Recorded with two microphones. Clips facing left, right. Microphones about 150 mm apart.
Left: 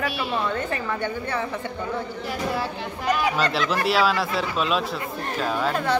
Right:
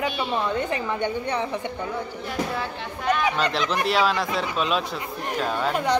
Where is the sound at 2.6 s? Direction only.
5° left (ahead or behind).